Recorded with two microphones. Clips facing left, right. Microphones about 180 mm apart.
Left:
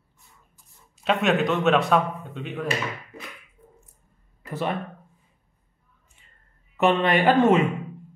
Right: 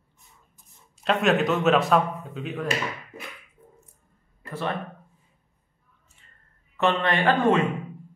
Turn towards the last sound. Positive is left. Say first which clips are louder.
# left 3 dB
turn(degrees=20)  # may be behind; listen again after turning